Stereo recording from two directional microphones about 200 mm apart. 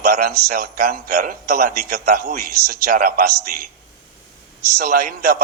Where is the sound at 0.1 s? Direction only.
45° right (ahead or behind).